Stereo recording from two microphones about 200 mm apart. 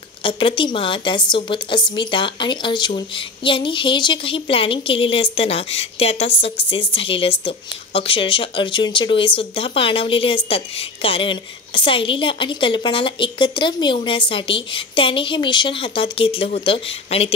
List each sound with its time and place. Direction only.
0.2 s a woman's voice: 25° left (ahead or behind)